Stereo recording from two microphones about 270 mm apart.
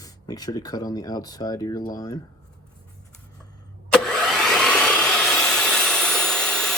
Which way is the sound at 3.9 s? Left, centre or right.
Centre.